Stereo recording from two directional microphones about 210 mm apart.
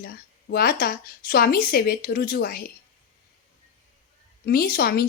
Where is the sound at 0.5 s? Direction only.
45° left (ahead or behind).